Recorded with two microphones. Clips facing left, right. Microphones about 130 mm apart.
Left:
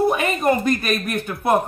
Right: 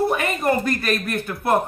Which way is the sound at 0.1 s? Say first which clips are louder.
Left 2 dB; 20° left (ahead or behind).